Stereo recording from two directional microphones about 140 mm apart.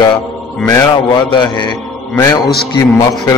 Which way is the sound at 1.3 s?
35° left (ahead or behind).